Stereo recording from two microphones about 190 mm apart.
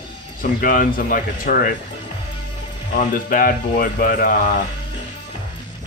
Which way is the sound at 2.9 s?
45° left (ahead or behind).